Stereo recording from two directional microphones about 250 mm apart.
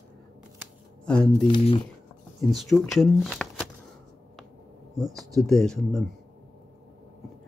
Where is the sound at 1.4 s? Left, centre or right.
Left.